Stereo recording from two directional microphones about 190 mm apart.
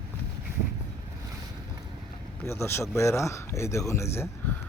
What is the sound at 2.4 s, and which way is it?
Speech, 15° left (ahead or behind).